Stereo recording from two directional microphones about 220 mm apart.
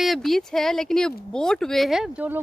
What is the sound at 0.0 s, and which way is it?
Speech, centre (ahead or behind).